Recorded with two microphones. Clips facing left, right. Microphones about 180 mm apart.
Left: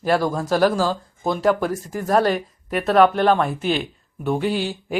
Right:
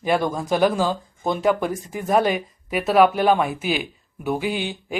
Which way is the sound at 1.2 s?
Centre (ahead or behind).